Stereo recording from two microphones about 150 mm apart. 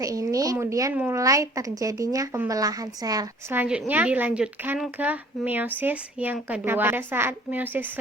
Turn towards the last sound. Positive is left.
turn(degrees=-10)  # may be behind; listen again after turning